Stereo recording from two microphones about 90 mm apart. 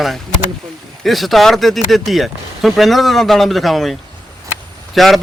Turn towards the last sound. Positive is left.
turn(degrees=0)  # may be behind; listen again after turning